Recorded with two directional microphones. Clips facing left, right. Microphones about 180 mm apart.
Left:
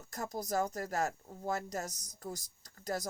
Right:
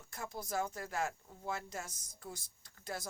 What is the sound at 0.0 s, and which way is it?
Speech, 40° left (ahead or behind).